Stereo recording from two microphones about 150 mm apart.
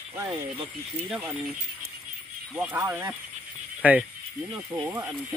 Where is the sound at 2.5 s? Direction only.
10° right (ahead or behind).